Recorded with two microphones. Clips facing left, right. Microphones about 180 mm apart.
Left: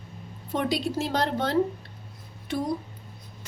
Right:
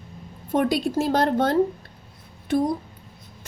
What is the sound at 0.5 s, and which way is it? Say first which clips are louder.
Speech: right 5 dB; 50° right (ahead or behind).